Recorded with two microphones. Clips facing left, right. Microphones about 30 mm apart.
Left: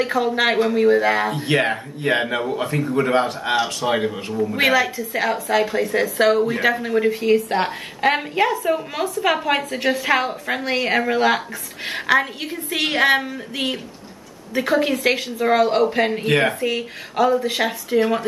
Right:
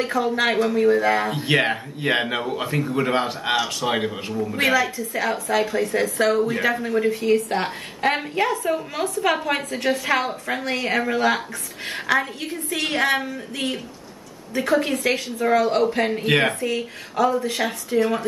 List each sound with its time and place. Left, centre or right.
0.2 s a woman's voice: centre
1.3 s speech: centre
4.6 s a woman's voice: centre
14.5 s a woman's voice: centre
16.3 s speech: centre
16.6 s a woman's voice: left
17.8 s a woman's voice: left